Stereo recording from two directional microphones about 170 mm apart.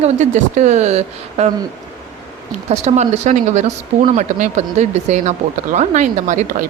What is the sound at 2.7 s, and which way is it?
A woman's voice, 40° right (ahead or behind).